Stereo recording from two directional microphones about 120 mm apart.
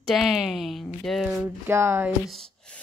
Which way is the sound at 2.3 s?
5° left (ahead or behind).